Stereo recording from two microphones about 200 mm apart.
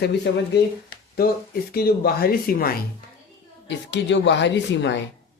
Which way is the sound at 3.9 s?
60° left (ahead or behind).